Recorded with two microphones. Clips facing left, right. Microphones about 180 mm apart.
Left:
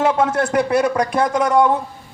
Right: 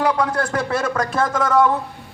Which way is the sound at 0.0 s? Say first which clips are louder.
Left 3 dB; 25° left (ahead or behind).